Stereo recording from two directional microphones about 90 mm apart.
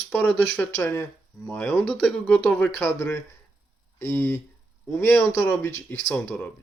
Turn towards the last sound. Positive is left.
turn(degrees=15)  # may be behind; listen again after turning